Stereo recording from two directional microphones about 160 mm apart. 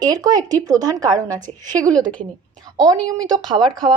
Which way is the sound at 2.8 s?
25° right (ahead or behind).